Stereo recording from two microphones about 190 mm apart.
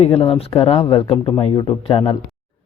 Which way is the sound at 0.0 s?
30° left (ahead or behind).